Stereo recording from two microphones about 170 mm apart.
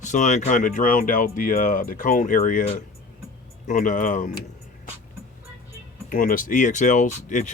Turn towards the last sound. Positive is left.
turn(degrees=45)  # may be behind; listen again after turning